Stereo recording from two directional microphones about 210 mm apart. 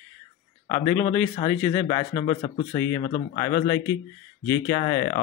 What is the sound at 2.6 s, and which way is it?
Speech, 10° left (ahead or behind).